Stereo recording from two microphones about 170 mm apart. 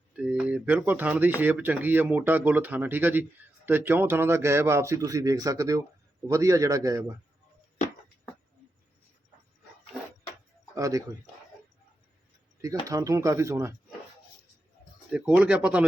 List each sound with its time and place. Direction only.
0.2 s a man's voice: 5° right (ahead or behind)
10.8 s speech: 20° right (ahead or behind)
12.6 s speech: 20° right (ahead or behind)
15.1 s speech: 5° right (ahead or behind)